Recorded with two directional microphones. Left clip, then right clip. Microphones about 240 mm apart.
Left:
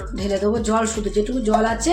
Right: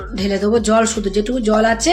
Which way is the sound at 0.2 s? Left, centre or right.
Right.